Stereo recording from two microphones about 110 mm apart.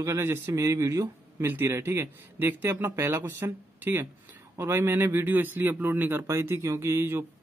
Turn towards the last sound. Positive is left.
turn(degrees=-20)  # may be behind; listen again after turning